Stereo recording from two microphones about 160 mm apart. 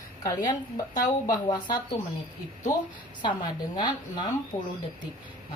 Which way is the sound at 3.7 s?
25° left (ahead or behind).